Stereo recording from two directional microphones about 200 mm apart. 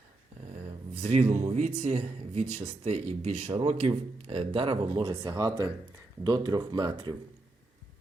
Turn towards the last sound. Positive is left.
turn(degrees=-20)  # may be behind; listen again after turning